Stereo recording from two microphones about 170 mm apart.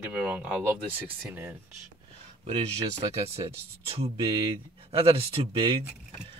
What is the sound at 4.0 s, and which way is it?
Speech, 30° right (ahead or behind).